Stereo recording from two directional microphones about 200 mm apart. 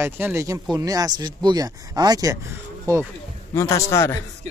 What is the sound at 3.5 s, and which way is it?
Speech, 15° left (ahead or behind).